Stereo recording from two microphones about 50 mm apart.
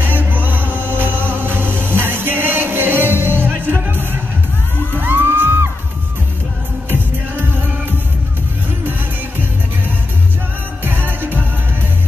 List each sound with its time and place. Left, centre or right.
0.0 s music: right
6.9 s music: right
10.8 s music: right